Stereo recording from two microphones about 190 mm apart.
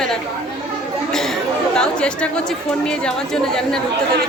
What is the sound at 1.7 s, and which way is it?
Speech, 5° left (ahead or behind).